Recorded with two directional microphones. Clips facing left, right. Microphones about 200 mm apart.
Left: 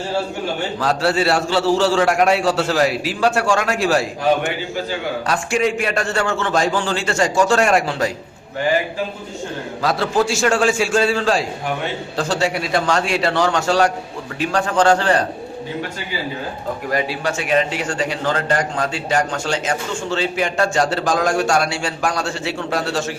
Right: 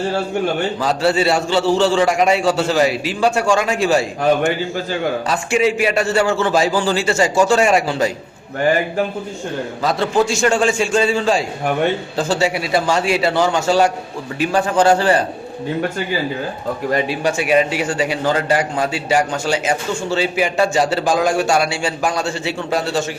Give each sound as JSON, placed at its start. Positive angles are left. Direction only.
{"t": 0.8, "sound": "a man's voice", "side_deg": 0}
{"t": 5.3, "sound": "a man's voice", "side_deg": 0}
{"t": 9.8, "sound": "a man's voice", "side_deg": 0}
{"t": 16.9, "sound": "speech", "side_deg": -25}
{"t": 17.2, "sound": "a man's voice", "side_deg": -10}